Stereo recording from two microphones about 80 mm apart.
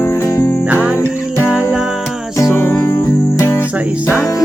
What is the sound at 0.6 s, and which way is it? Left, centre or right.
Music, centre.